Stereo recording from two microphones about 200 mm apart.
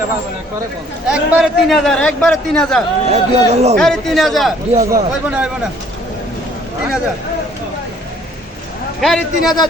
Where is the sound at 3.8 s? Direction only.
Centre (ahead or behind).